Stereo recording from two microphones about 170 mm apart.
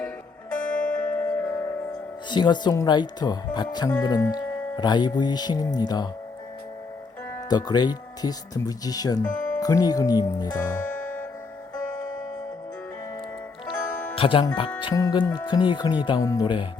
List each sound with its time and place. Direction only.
0.6 s music: 5° left (ahead or behind)
2.3 s speech: 25° left (ahead or behind)
7.5 s speech: 25° left (ahead or behind)
14.2 s speech: 30° left (ahead or behind)